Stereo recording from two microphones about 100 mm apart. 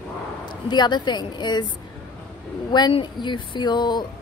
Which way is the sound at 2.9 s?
55° left (ahead or behind).